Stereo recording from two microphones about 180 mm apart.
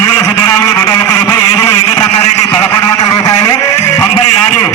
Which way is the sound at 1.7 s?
30° left (ahead or behind).